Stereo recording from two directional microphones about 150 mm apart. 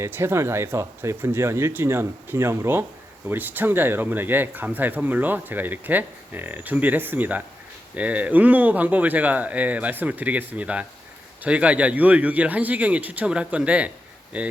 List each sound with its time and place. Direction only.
0.0 s speech: 15° right (ahead or behind)